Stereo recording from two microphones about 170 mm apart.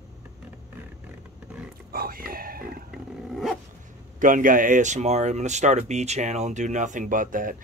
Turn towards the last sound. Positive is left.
turn(degrees=-50)  # may be behind; listen again after turning